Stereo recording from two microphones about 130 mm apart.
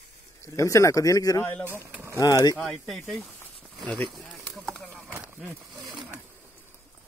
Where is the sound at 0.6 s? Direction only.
25° left (ahead or behind).